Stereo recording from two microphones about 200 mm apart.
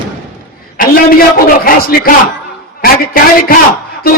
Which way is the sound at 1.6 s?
45° left (ahead or behind).